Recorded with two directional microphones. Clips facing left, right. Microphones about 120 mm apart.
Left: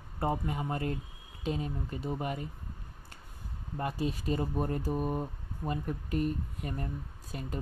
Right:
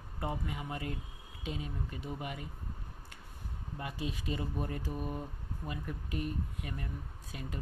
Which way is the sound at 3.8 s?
45° left (ahead or behind).